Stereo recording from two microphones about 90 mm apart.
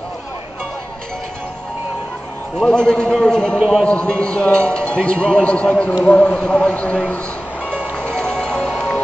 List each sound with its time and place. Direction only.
2.6 s a man's voice: 10° left (ahead or behind)
3.5 s a man's voice: 5° right (ahead or behind)
3.8 s a man's voice: 10° left (ahead or behind)
8.0 s music: 15° left (ahead or behind)